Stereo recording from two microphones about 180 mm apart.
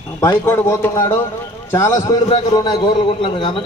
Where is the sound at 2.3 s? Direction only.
25° left (ahead or behind).